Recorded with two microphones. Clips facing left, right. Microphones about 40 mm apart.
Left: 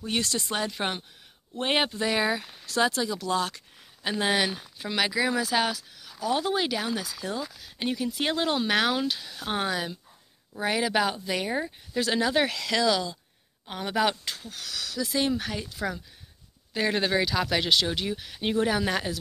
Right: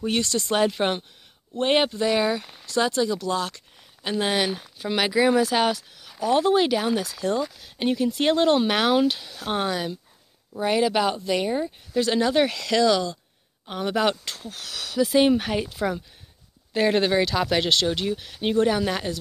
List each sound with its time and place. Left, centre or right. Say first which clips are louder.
0.2 s speech: right 4 dB; centre
0.7 s speech: right 6 dB; centre
1.6 s speech: right 5 dB; centre
4.0 s speech: right 2 dB; centre
7.1 s speech: right 8 dB; centre
9.3 s speech: right 3 dB; centre
14.8 s speech: right 8 dB; right
16.7 s speech: right 5 dB; centre